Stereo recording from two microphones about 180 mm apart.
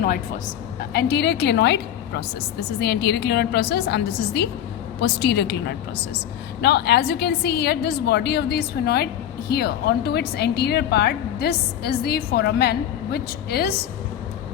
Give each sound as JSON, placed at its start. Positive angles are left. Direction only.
{"t": 0.8, "sound": "a woman's voice", "side_deg": 65}